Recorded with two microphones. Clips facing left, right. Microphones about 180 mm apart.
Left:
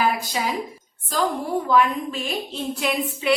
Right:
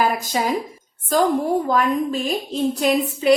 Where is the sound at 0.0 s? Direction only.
45° right (ahead or behind).